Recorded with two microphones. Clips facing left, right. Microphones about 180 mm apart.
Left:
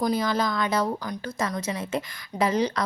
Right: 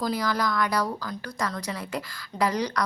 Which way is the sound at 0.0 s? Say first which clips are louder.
Left 2 dB; 25° left (ahead or behind).